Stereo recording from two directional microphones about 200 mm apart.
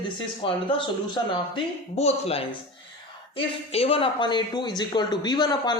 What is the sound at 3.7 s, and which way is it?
Speech, 30° left (ahead or behind).